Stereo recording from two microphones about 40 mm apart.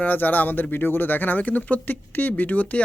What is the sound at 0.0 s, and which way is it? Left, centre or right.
Speech, left.